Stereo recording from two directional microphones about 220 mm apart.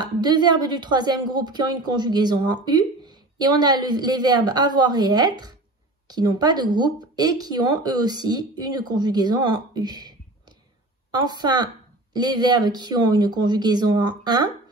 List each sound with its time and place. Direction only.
0.0 s a woman's voice: 20° right (ahead or behind)